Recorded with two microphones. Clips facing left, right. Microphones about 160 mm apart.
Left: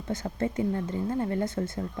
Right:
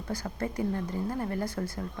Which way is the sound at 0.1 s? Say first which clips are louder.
Left 4 dB; 25° left (ahead or behind).